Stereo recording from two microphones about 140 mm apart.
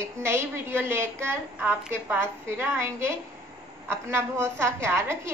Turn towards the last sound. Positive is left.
turn(degrees=-20)  # may be behind; listen again after turning